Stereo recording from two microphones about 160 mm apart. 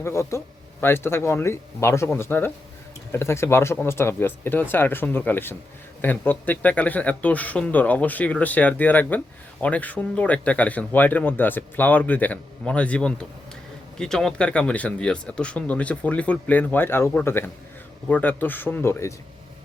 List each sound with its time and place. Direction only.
0.0 s speech: 15° left (ahead or behind)